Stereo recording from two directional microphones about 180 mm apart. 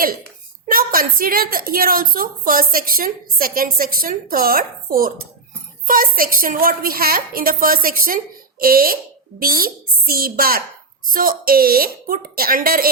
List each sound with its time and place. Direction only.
0.6 s a woman's voice: 50° right (ahead or behind)